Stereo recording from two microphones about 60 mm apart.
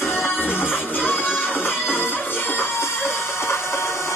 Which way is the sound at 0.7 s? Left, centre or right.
Left.